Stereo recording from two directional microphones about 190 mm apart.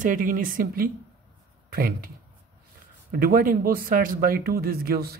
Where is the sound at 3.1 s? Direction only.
45° right (ahead or behind).